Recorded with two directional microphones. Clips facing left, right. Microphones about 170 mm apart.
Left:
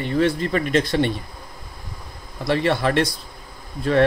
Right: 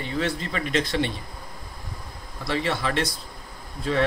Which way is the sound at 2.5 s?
60° left (ahead or behind).